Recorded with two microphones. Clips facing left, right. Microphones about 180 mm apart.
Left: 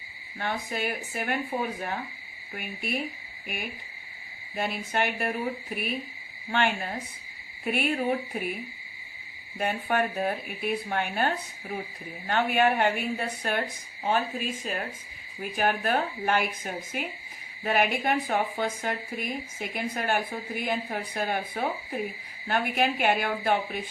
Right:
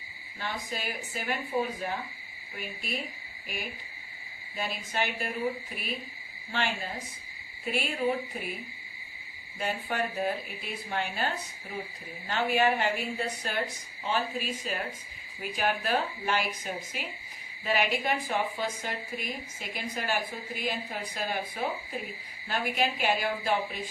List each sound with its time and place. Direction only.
0.3 s speech: 60° left (ahead or behind)
4.5 s speech: 60° left (ahead or behind)
9.6 s a woman's voice: 60° left (ahead or behind)